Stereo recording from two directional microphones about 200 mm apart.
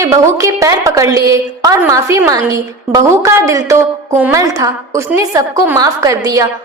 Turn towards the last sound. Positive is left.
turn(degrees=-15)  # may be behind; listen again after turning